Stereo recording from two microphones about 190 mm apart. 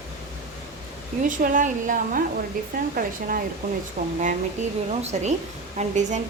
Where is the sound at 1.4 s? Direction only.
45° right (ahead or behind).